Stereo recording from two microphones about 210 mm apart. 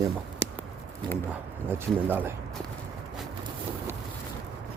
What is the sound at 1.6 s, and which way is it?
Speech, 10° right (ahead or behind).